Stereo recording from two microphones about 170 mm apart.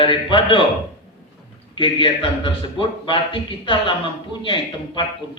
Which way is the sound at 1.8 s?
30° left (ahead or behind).